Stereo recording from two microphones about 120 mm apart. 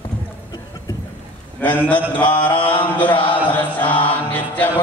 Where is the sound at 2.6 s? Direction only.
45° left (ahead or behind).